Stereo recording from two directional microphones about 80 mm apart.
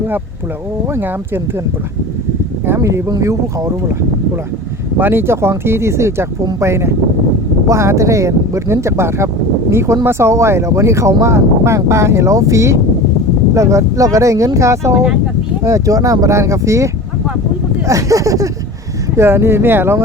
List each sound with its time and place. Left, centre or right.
0.9 s speech: right
2.6 s speech: right
4.9 s speech: right
19.1 s speech: right